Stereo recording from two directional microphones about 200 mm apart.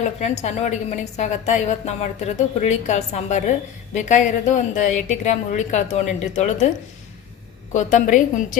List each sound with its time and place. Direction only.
0.0 s a woman's voice: 35° left (ahead or behind)
7.7 s a woman's voice: 40° left (ahead or behind)